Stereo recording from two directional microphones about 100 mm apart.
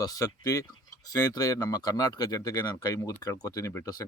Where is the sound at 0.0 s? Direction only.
35° left (ahead or behind).